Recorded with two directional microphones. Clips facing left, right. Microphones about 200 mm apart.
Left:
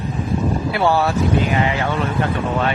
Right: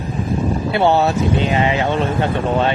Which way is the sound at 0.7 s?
25° right (ahead or behind).